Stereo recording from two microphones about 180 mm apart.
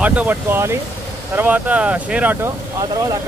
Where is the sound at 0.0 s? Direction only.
10° right (ahead or behind).